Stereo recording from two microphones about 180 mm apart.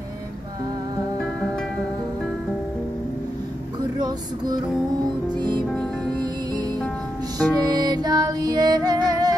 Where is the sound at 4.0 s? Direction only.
20° right (ahead or behind).